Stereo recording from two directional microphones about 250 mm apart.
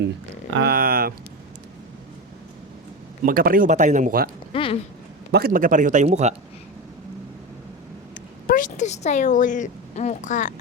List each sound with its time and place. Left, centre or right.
0.5 s speech: right
3.2 s speech: right
4.5 s speech: left
5.3 s speech: right
8.4 s a woman's voice: left